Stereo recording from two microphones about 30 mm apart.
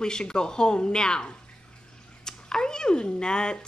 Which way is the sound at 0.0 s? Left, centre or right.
Left.